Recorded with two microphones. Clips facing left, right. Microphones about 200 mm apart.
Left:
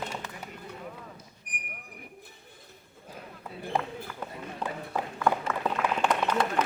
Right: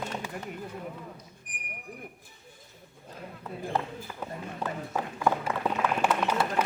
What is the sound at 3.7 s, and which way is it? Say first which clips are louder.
Run: left 1 dB; 10° left (ahead or behind).